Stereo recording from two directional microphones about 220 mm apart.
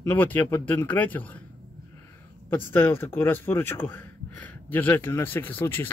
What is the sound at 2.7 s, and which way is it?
Speech, 10° left (ahead or behind).